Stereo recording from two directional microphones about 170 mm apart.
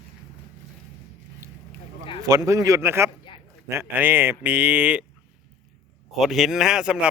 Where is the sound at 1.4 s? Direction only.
15° right (ahead or behind).